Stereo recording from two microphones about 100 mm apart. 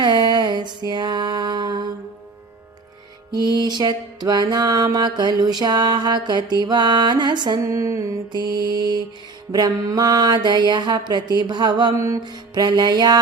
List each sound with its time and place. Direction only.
0.0 s a sound: 50° right (ahead or behind)
3.3 s music: 45° right (ahead or behind)
7.6 s music: 30° right (ahead or behind)
11.9 s music: 30° right (ahead or behind)
12.2 s music: 45° right (ahead or behind)